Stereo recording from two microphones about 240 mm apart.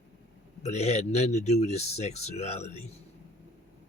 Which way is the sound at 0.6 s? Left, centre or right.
Left.